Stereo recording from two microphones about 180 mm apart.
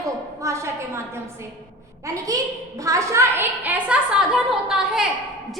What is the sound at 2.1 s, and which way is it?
A woman's voice, 20° right (ahead or behind).